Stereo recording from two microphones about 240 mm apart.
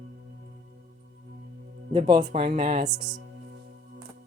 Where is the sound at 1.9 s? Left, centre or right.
Centre.